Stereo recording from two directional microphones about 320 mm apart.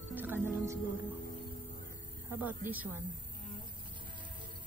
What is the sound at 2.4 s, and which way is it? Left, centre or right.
Speech, centre.